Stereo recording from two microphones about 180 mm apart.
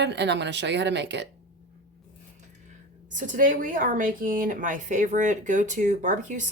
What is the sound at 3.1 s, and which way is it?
A woman's voice, 45° right (ahead or behind).